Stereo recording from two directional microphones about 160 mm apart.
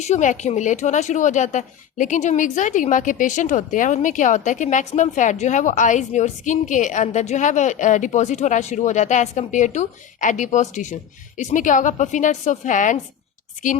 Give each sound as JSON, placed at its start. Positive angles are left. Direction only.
{"t": 0.0, "sound": "speech", "side_deg": 50}